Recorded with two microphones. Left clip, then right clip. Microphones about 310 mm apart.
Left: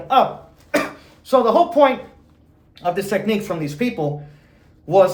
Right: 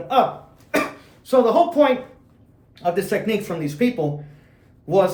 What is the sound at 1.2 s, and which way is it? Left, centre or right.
Speech, centre.